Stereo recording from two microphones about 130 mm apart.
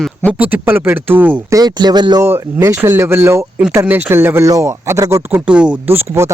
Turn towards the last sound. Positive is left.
turn(degrees=-20)  # may be behind; listen again after turning